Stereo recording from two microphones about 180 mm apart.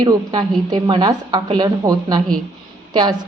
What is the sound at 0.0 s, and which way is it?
A woman's voice, 20° right (ahead or behind).